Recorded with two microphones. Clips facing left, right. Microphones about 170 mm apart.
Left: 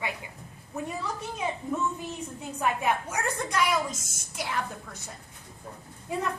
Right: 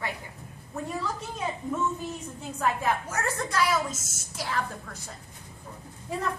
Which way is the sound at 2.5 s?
10° left (ahead or behind).